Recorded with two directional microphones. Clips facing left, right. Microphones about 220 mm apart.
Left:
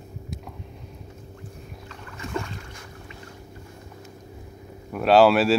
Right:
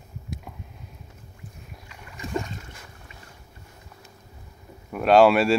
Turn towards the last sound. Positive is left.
turn(degrees=0)  # may be behind; listen again after turning